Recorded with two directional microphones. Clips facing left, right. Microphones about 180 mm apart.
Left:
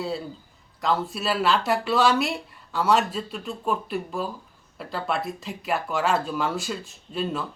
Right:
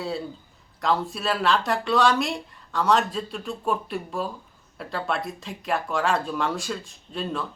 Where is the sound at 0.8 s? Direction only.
Centre (ahead or behind).